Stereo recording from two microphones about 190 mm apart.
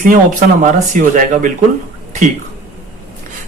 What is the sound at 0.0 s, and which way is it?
Speech, 45° right (ahead or behind).